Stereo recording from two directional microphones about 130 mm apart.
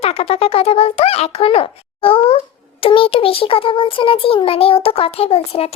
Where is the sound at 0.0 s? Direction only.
50° left (ahead or behind).